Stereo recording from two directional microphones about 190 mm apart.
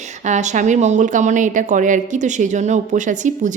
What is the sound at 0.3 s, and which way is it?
A woman's voice, 40° right (ahead or behind).